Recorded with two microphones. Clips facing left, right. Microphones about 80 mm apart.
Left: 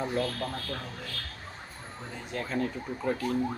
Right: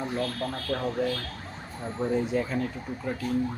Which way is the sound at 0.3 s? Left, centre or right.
Centre.